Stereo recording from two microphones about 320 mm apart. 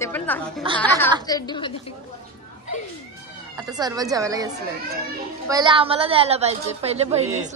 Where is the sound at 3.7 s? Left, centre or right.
Centre.